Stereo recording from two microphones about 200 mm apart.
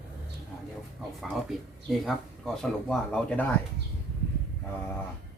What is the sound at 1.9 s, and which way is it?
Speech, centre (ahead or behind).